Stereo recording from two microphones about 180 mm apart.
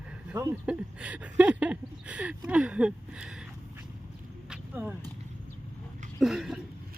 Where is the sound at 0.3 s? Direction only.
10° right (ahead or behind).